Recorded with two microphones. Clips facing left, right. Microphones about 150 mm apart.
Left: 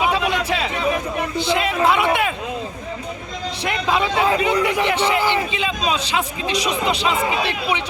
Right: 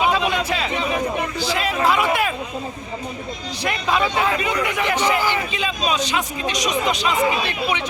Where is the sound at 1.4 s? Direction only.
25° left (ahead or behind).